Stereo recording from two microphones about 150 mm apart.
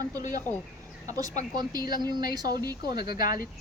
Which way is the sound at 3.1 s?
75° left (ahead or behind).